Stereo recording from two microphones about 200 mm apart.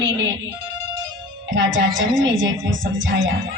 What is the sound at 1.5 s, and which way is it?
A woman's voice, 70° right (ahead or behind).